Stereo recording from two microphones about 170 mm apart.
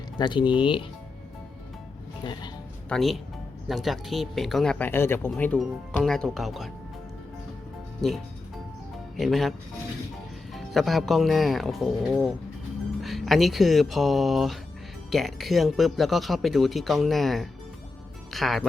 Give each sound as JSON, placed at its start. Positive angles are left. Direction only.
{"t": 0.2, "sound": "speech", "side_deg": 30}
{"t": 2.2, "sound": "speech", "side_deg": 25}
{"t": 2.9, "sound": "speech", "side_deg": 0}
{"t": 9.1, "sound": "speech", "side_deg": 0}